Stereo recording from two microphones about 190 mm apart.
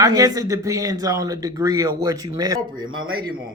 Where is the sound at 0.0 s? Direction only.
20° right (ahead or behind).